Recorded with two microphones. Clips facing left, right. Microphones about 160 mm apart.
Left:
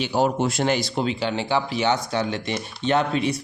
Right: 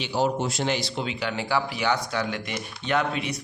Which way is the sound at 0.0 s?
50° left (ahead or behind).